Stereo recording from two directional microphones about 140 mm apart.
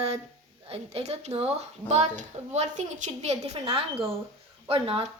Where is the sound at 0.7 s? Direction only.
45° right (ahead or behind).